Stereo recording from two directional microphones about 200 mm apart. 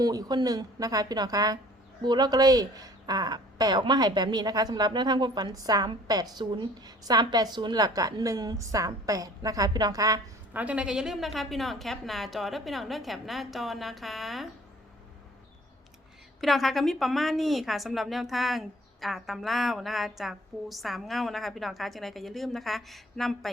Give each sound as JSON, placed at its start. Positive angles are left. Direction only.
{"t": 0.0, "sound": "speech", "side_deg": -20}
{"t": 16.4, "sound": "a woman's voice", "side_deg": 0}